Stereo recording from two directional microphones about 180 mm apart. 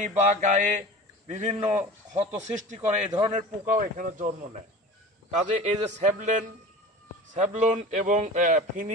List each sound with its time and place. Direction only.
0.3 s a man's voice: 45° right (ahead or behind)